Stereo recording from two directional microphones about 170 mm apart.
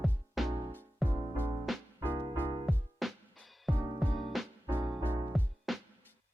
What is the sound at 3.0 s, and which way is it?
Music, centre (ahead or behind).